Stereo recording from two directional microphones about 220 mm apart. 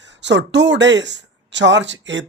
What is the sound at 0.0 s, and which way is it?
Speech, 55° right (ahead or behind).